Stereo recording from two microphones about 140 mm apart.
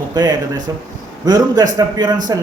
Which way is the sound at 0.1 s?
30° right (ahead or behind).